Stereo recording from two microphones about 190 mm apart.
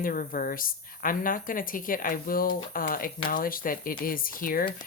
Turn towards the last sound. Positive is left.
turn(degrees=50)  # may be behind; listen again after turning